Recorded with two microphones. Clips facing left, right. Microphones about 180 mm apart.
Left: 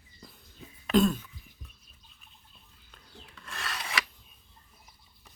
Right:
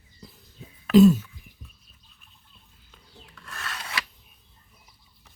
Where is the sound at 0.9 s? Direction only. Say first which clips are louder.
Right 9 dB; 5° right (ahead or behind).